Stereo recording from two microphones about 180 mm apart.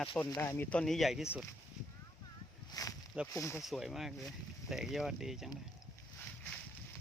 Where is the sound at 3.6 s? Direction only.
Centre (ahead or behind).